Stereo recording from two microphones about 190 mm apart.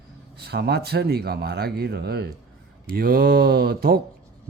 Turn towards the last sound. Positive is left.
turn(degrees=-55)  # may be behind; listen again after turning